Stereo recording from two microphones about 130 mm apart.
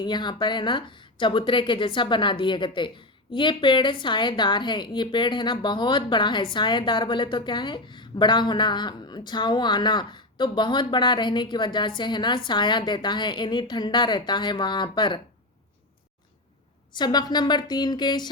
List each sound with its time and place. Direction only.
0.0 s a woman's voice: 35° left (ahead or behind)
16.9 s a woman's voice: 35° left (ahead or behind)